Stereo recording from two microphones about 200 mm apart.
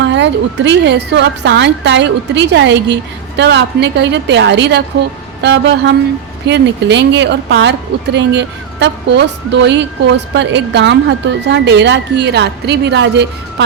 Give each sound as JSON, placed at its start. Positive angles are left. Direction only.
{"t": 0.0, "sound": "a woman's voice", "side_deg": -65}